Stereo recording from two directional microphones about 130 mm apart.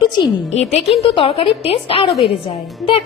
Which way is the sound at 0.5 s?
45° left (ahead or behind).